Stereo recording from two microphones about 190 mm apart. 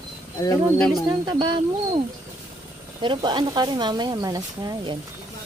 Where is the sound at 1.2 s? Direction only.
25° right (ahead or behind).